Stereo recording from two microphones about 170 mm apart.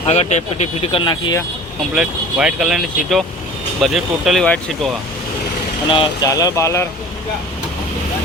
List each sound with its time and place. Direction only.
0.0 s speech: 40° left (ahead or behind); by 1.5 s 20° left (ahead or behind)
2.0 s speech: 5° right (ahead or behind)
5.9 s speech: 25° left (ahead or behind)